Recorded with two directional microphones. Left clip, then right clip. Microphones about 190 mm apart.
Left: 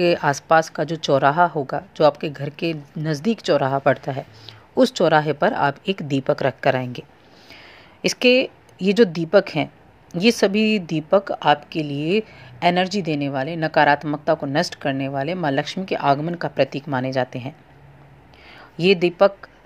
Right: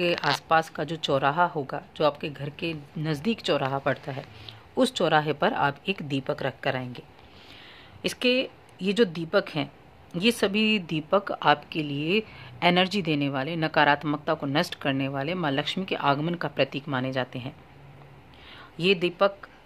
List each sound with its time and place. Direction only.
0.0 s a woman's voice: 20° left (ahead or behind)
7.5 s a sound: 20° left (ahead or behind)
8.8 s a woman's voice: 20° left (ahead or behind)